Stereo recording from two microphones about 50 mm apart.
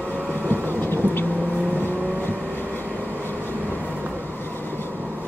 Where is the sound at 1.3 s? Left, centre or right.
Right.